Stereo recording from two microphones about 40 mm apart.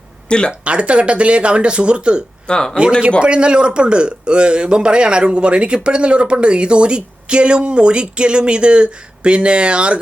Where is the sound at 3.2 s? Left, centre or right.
Right.